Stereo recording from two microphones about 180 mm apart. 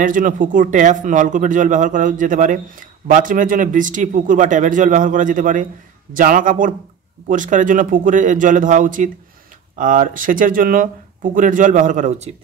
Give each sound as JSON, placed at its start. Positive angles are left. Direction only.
{"t": 0.0, "sound": "speech", "side_deg": -45}